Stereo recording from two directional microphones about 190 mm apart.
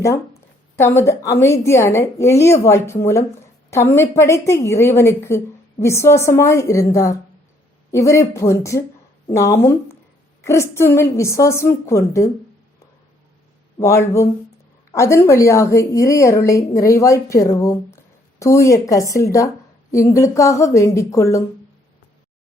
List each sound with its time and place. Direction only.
0.8 s a woman's voice: 15° left (ahead or behind)
13.8 s a woman's voice: 15° left (ahead or behind)